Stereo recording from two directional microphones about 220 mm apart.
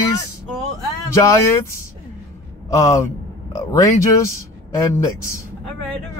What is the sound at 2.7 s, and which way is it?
A man's voice, 15° left (ahead or behind).